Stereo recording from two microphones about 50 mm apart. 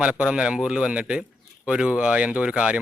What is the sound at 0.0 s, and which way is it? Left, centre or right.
Speech, right.